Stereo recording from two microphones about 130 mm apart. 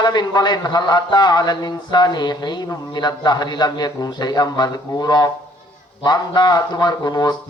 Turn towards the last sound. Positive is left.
turn(degrees=30)  # may be behind; listen again after turning